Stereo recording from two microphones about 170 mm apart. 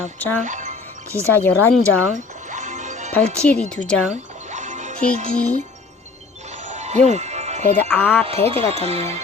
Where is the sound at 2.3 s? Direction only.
45° right (ahead or behind).